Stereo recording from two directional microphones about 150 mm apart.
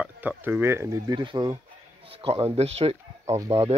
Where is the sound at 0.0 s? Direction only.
10° right (ahead or behind); by 3.0 s 45° right (ahead or behind).